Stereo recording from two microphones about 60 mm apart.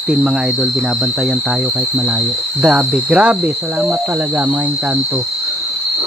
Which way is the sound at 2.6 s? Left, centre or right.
Centre.